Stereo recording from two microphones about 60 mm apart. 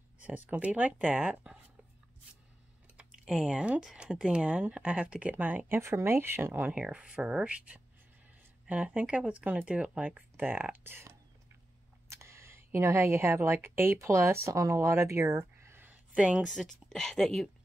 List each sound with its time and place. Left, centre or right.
0.2 s speech: right
1.3 s a sound: centre
3.1 s speech: centre
5.3 s speech: right
5.8 s speech: right
6.7 s a woman's voice: centre; by 13.9 s right
13.9 s speech: right
16.2 s speech: centre
16.4 s speech: centre